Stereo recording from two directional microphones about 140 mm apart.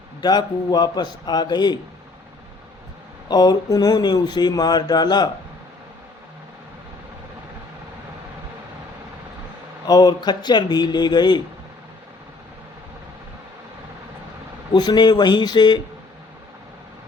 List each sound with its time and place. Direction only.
0.2 s speech: 30° left (ahead or behind)
3.2 s speech: 30° left (ahead or behind)
9.8 s speech: 30° left (ahead or behind)
14.7 s speech: 30° left (ahead or behind)